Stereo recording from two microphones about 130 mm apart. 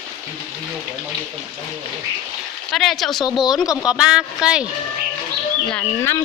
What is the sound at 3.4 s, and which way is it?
Speech, 30° left (ahead or behind).